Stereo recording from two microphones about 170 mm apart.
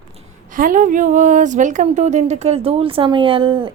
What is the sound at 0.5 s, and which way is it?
A woman's voice, 50° right (ahead or behind).